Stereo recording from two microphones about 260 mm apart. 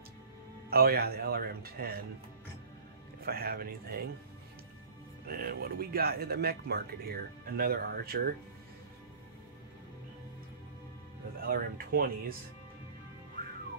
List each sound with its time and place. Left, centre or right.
0.7 s speech: right
3.3 s speech: right
5.2 s speech: right
11.4 s speech: right